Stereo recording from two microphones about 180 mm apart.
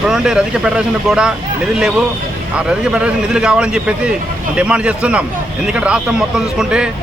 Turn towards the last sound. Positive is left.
turn(degrees=-5)  # may be behind; listen again after turning